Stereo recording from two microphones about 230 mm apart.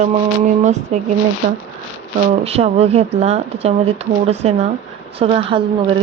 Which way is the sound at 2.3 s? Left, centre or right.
Right.